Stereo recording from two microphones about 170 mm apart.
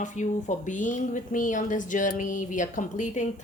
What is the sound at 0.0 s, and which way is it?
Speech, 45° left (ahead or behind).